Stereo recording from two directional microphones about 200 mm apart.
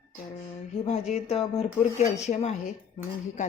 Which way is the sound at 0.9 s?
30° left (ahead or behind).